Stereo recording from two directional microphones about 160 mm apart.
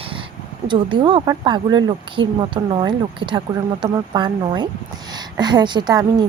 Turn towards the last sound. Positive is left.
turn(degrees=-25)  # may be behind; listen again after turning